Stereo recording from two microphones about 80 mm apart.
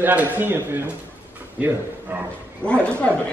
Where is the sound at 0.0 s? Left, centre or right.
Right.